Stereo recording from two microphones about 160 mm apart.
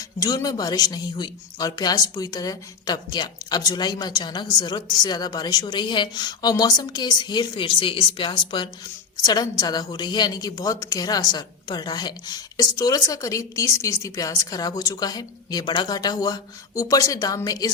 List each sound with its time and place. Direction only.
0.2 s a woman's voice: 25° left (ahead or behind)